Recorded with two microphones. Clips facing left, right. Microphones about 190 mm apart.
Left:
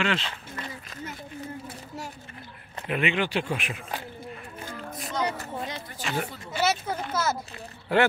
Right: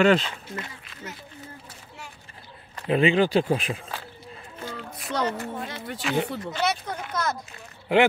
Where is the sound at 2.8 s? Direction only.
30° right (ahead or behind).